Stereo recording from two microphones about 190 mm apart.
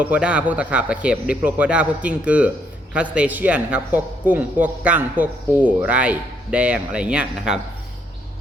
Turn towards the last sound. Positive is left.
turn(degrees=-5)  # may be behind; listen again after turning